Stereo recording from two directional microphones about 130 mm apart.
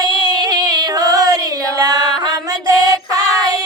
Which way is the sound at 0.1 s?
30° right (ahead or behind).